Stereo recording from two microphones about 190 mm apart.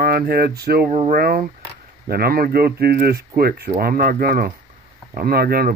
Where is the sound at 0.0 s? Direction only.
55° right (ahead or behind).